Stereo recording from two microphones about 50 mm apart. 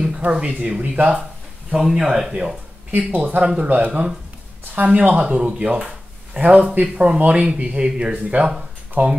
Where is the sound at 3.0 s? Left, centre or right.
Right.